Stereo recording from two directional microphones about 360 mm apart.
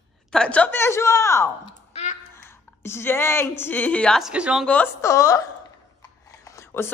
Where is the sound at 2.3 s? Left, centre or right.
Centre.